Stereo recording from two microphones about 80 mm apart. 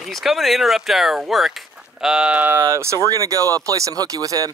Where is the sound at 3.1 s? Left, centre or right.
Right.